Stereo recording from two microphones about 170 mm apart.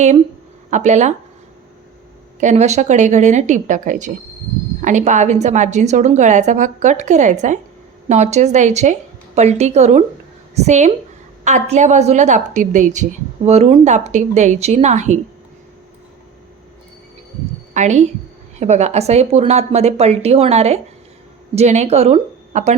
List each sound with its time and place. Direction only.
0.7 s a woman's voice: 45° right (ahead or behind)
2.4 s a woman's voice: 40° right (ahead or behind)
17.7 s a woman's voice: 40° right (ahead or behind)